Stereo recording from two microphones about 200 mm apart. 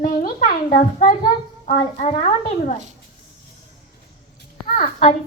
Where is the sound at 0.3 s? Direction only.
40° left (ahead or behind).